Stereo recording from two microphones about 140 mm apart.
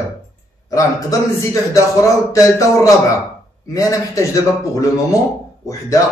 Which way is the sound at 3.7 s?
25° left (ahead or behind).